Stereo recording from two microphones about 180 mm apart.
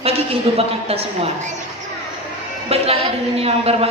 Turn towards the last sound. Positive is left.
turn(degrees=-35)  # may be behind; listen again after turning